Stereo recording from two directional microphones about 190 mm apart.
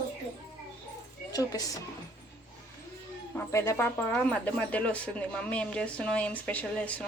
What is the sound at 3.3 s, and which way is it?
Speech, 15° left (ahead or behind).